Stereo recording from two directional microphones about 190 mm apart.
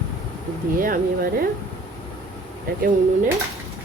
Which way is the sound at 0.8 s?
45° right (ahead or behind).